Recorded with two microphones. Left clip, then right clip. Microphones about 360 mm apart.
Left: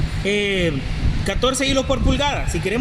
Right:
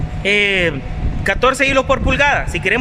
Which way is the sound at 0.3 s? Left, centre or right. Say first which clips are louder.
Right 6 dB; right.